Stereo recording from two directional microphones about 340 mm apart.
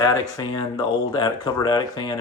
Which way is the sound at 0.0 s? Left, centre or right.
Centre.